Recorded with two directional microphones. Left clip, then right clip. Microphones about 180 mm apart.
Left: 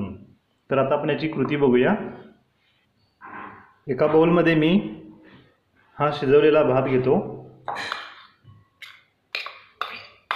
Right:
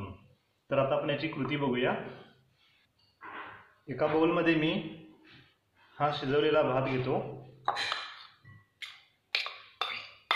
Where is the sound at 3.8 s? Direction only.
50° left (ahead or behind).